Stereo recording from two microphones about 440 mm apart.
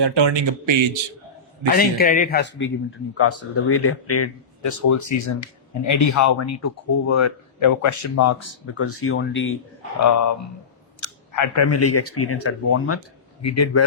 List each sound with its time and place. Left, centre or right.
0.0 s speech: right
1.7 s a man's voice: centre
10.0 s speech: left